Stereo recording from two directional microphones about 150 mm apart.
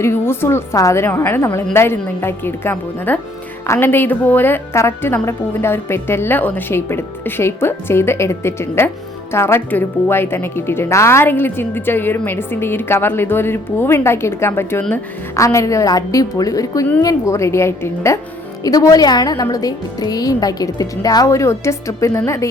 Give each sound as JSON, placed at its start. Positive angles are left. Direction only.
{"t": 0.0, "sound": "a woman's voice", "side_deg": 15}